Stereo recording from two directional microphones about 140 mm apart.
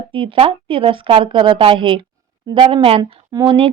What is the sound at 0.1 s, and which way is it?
Speech, 40° right (ahead or behind).